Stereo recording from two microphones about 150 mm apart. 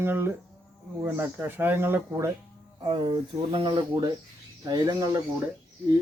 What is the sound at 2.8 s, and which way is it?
Speech, 35° right (ahead or behind).